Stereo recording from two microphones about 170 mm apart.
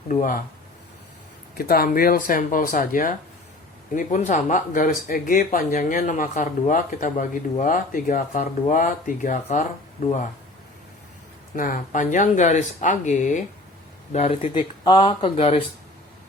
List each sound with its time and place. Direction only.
0.1 s speech: 50° left (ahead or behind)
1.5 s speech: 60° left (ahead or behind)
11.5 s speech: 55° left (ahead or behind)
14.5 s speech: 30° left (ahead or behind)